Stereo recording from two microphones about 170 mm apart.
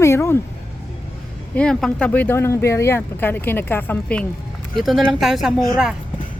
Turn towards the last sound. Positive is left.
turn(degrees=-5)  # may be behind; listen again after turning